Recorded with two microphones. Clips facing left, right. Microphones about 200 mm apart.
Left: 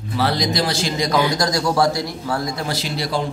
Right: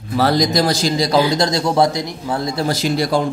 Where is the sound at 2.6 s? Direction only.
45° right (ahead or behind).